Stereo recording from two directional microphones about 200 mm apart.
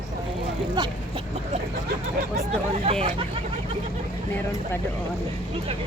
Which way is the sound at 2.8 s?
30° right (ahead or behind).